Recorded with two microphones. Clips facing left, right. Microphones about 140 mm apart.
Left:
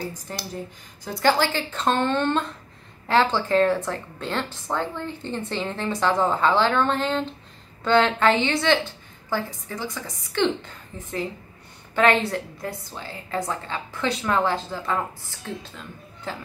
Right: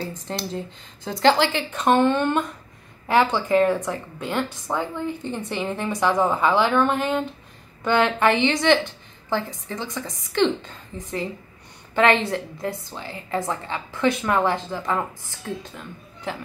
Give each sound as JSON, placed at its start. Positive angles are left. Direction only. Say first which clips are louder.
{"t": 0.0, "sound": "a woman's voice", "louder": "right 3 dB", "side_deg": -25}